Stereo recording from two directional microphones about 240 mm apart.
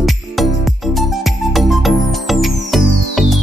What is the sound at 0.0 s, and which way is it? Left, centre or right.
Music, centre.